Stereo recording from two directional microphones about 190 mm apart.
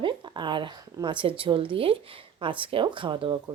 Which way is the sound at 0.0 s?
25° right (ahead or behind).